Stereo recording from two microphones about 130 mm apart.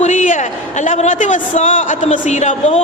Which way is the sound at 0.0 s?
75° left (ahead or behind).